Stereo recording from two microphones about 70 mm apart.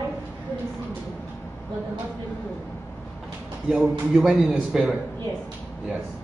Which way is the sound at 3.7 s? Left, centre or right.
Centre.